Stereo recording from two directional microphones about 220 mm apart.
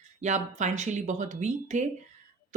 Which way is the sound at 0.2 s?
35° right (ahead or behind).